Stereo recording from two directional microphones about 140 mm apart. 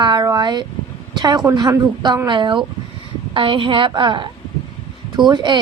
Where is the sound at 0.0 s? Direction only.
30° right (ahead or behind).